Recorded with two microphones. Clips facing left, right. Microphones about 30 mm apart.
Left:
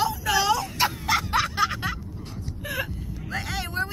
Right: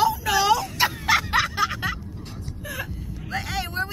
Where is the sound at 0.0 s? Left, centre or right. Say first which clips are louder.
Right 3 dB; centre.